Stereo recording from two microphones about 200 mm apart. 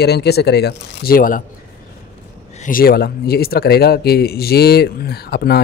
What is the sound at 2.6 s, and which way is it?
Speech, 45° left (ahead or behind).